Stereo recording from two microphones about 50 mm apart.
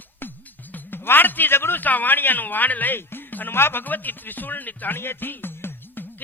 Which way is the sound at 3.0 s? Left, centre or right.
Left.